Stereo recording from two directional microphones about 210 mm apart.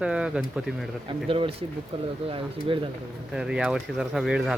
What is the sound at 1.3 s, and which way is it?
Speech, 25° right (ahead or behind).